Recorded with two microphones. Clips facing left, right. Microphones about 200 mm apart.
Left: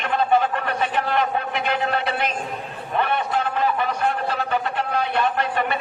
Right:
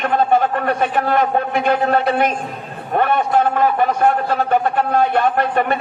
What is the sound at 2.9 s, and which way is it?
A man's voice, 45° right (ahead or behind).